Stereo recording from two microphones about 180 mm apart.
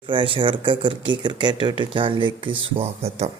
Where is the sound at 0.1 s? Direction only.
25° right (ahead or behind).